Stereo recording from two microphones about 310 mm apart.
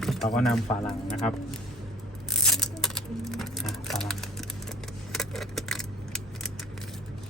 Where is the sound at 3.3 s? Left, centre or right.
Centre.